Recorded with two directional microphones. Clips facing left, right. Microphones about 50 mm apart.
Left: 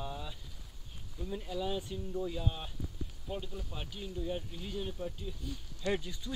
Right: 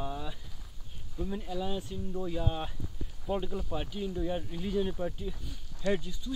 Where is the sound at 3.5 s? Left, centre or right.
Right.